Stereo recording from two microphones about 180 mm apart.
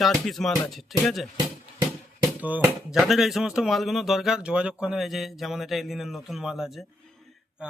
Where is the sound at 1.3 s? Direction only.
20° right (ahead or behind).